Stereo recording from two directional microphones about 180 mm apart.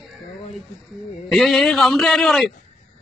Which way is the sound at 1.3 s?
Centre (ahead or behind).